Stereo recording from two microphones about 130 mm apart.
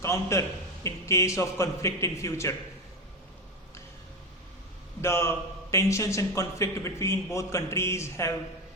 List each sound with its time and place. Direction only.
0.0 s a man's voice: 20° left (ahead or behind)
4.9 s a man's voice: 20° left (ahead or behind)